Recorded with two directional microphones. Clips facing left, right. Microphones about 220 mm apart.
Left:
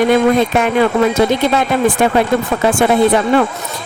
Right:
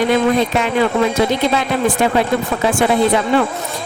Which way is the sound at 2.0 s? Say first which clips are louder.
Left 2 dB; 55° left (ahead or behind).